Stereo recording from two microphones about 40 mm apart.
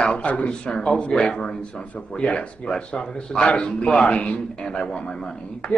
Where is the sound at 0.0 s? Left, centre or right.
Left.